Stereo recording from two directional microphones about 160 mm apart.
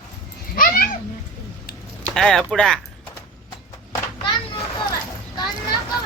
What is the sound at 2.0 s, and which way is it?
Speech, 5° left (ahead or behind).